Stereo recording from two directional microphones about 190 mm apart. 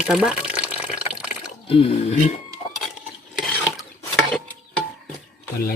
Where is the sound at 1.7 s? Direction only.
35° left (ahead or behind).